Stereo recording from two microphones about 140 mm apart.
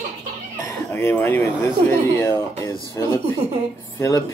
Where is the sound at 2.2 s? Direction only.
20° left (ahead or behind).